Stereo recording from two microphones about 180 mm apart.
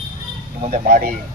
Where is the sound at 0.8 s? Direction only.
45° right (ahead or behind).